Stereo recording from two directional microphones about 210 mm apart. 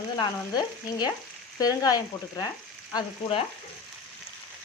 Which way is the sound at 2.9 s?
25° left (ahead or behind).